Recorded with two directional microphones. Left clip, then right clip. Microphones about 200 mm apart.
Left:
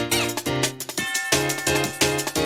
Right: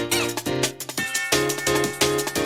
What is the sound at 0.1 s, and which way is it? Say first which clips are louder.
Music: even; centre (ahead or behind).